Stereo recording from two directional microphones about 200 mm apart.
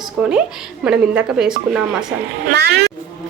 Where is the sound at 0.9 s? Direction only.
5° right (ahead or behind).